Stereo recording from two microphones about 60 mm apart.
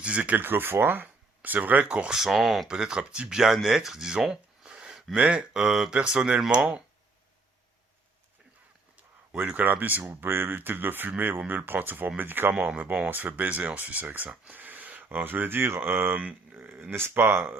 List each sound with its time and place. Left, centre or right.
0.0 s speech: right
2.1 s speech: centre
2.6 s speech: centre
5.1 s speech: right
5.5 s speech: centre
9.3 s speech: right
12.7 s speech: right
16.9 s speech: right